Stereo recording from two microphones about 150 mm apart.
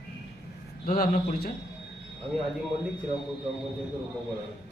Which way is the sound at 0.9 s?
75° left (ahead or behind).